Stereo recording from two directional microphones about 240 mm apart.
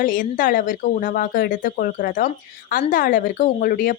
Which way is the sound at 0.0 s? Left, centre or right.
Left.